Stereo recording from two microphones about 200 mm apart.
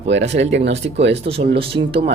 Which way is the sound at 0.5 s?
60° right (ahead or behind).